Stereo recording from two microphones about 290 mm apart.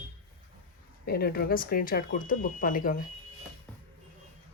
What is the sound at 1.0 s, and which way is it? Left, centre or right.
Speech, left.